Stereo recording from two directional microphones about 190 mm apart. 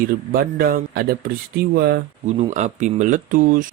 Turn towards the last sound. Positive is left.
turn(degrees=-45)  # may be behind; listen again after turning